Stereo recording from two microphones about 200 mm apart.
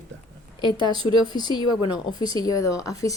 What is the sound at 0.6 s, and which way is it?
A woman's voice, 20° left (ahead or behind).